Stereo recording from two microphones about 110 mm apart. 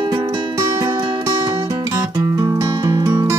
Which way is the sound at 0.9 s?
45° right (ahead or behind).